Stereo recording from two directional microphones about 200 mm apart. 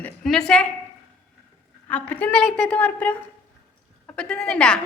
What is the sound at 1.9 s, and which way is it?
A woman's voice, 10° left (ahead or behind).